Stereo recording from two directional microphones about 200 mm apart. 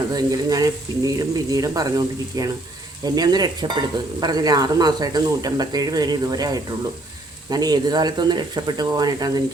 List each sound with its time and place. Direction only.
0.1 s speech: 20° right (ahead or behind)